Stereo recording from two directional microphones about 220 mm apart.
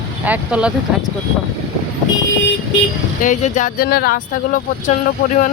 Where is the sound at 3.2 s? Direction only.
35° left (ahead or behind).